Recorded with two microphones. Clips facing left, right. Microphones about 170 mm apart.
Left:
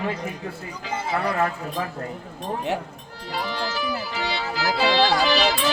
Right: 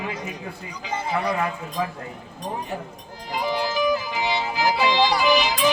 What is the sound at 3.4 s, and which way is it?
Music, 15° right (ahead or behind).